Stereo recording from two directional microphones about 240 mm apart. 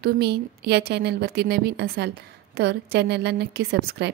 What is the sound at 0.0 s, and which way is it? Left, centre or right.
A woman's voice, right.